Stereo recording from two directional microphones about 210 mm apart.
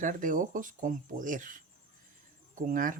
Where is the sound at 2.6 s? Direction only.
40° right (ahead or behind).